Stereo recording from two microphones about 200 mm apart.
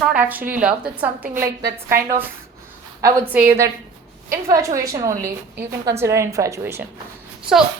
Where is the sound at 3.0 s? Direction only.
10° right (ahead or behind).